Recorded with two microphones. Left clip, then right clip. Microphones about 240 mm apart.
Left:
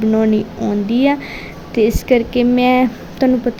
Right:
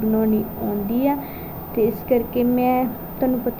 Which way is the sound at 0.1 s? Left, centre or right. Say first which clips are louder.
Left 5 dB; left.